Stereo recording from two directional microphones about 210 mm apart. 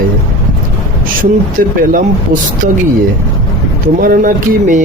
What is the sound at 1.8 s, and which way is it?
Speech, 40° right (ahead or behind).